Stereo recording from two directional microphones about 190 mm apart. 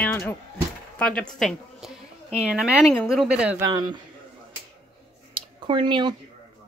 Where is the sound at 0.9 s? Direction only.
5° left (ahead or behind); by 4.0 s 20° right (ahead or behind).